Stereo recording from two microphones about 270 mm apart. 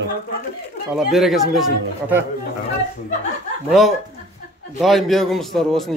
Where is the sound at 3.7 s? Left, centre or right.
Centre.